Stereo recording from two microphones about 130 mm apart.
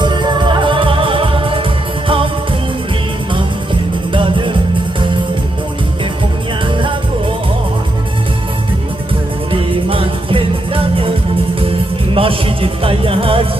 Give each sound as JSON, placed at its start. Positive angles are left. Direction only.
{"t": 0.0, "sound": "music", "side_deg": -35}
{"t": 4.1, "sound": "music", "side_deg": -40}
{"t": 6.7, "sound": "music", "side_deg": -40}
{"t": 9.5, "sound": "music", "side_deg": -45}